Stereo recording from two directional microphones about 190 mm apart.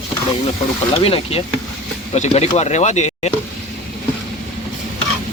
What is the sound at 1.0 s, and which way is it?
Speech, 30° left (ahead or behind).